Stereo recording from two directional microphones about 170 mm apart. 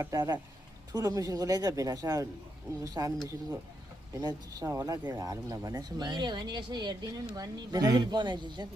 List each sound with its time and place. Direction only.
0.0 s speech: 20° right (ahead or behind)
4.1 s speech: 20° right (ahead or behind)